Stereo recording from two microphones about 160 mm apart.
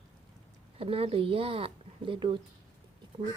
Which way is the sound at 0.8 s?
35° right (ahead or behind).